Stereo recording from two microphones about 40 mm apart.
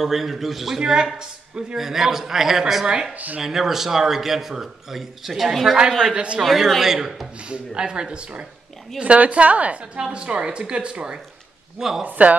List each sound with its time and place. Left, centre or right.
0.0 s a man's voice: centre
0.7 s a woman's voice: centre
1.8 s a man's voice: centre
5.8 s a woman's voice: centre
6.1 s a woman's voice: right
6.4 s a man's voice: centre
7.4 s a woman's voice: right
9.9 s a woman's voice: right
12.0 s a woman's voice: right